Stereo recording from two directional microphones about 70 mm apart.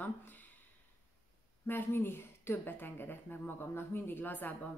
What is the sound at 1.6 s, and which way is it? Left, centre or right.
Speech, left.